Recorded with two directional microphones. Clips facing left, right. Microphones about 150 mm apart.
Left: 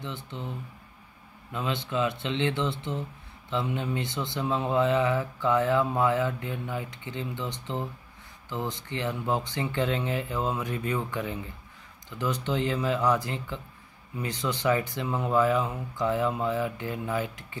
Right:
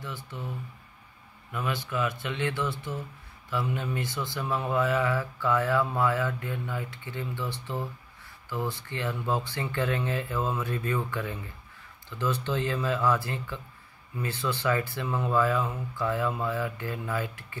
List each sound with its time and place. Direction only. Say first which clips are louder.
0.0 s speech: left 2 dB; 20° left (ahead or behind)